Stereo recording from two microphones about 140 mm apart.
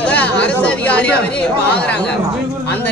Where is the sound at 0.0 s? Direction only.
10° left (ahead or behind).